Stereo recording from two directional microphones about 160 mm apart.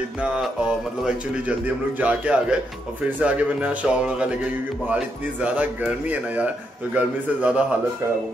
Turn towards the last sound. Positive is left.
turn(degrees=-10)  # may be behind; listen again after turning